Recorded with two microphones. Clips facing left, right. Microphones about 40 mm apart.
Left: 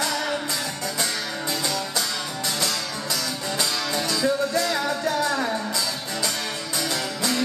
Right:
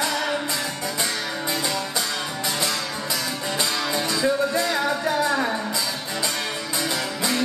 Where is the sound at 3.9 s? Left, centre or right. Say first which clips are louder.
Right 1 dB; right.